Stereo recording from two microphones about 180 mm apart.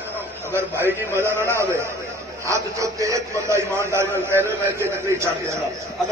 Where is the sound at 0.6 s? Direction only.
10° right (ahead or behind).